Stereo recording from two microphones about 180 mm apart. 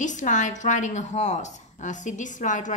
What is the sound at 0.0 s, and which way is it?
A woman's voice, 45° left (ahead or behind).